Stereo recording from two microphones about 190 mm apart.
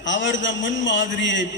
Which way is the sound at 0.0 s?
75° left (ahead or behind).